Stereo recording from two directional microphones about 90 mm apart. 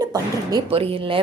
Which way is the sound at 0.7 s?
90° right.